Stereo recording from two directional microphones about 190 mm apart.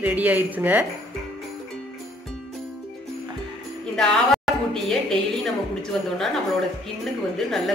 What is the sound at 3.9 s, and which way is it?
A woman's voice, 5° left (ahead or behind).